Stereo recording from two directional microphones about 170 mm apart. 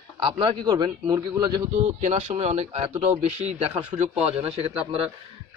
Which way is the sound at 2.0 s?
45° right (ahead or behind).